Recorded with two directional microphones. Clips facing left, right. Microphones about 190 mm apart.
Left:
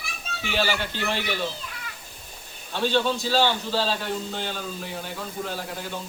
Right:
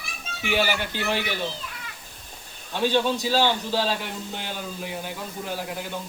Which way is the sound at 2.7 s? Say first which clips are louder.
Right 1 dB; 15° right (ahead or behind).